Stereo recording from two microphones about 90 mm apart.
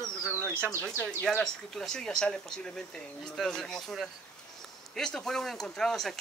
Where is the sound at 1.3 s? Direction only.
5° left (ahead or behind).